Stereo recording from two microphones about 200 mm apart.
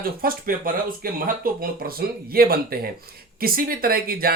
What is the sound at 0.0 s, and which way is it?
Speech, 45° right (ahead or behind).